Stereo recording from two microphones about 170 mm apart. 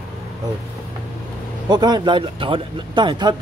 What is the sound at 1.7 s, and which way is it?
Speech, 25° right (ahead or behind).